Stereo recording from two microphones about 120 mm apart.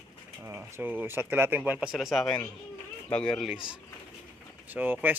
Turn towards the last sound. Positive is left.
turn(degrees=-15)  # may be behind; listen again after turning